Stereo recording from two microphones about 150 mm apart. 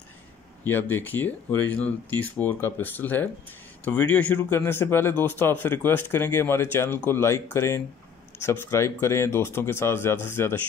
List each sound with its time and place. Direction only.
0.7 s speech: 15° left (ahead or behind)